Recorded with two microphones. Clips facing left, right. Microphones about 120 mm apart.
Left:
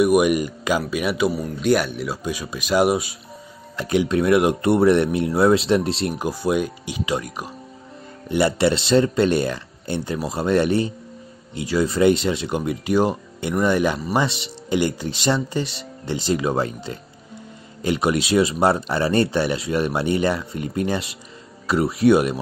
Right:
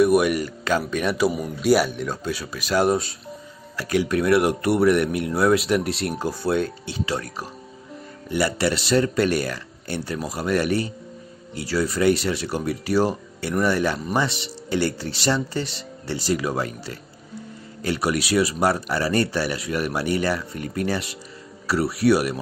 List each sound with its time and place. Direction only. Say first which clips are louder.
0.0 s a man's voice: left 1 dB; 15° left (ahead or behind)
2.2 s a man's voice: left 2 dB; 15° left (ahead or behind)
6.1 s a man's voice: even; 15° left (ahead or behind)